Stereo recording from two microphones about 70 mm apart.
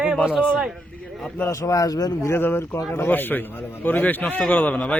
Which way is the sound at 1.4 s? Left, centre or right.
Left.